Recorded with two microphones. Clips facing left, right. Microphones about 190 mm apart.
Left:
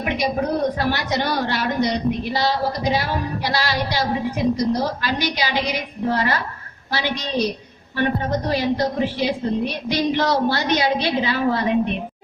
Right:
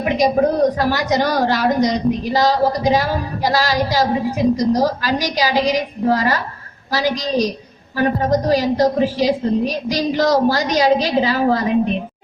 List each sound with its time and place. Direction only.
0.0 s a woman's voice: 40° right (ahead or behind)